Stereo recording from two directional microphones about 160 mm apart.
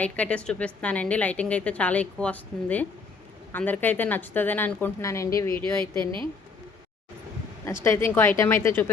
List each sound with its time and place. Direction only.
0.0 s a woman's voice: 10° left (ahead or behind)
5.9 s a woman's voice: 30° right (ahead or behind)
7.9 s a woman's voice: 15° left (ahead or behind)